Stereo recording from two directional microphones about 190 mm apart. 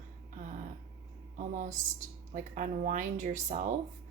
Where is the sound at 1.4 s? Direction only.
45° right (ahead or behind).